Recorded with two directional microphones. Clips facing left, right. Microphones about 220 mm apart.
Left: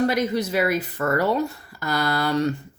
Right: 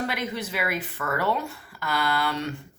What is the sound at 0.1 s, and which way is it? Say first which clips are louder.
Speech: left 8 dB; 40° left (ahead or behind).